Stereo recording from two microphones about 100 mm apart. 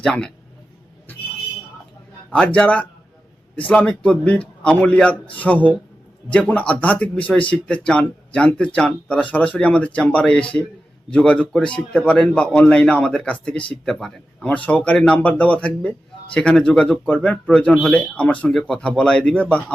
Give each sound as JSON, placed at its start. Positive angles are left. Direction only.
{"t": 0.0, "sound": "speech", "side_deg": 10}
{"t": 2.3, "sound": "speech", "side_deg": 10}